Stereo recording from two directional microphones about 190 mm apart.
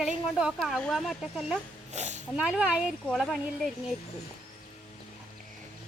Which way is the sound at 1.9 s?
40° right (ahead or behind).